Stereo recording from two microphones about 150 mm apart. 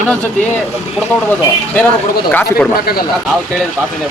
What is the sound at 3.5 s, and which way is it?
Speech, 5° left (ahead or behind).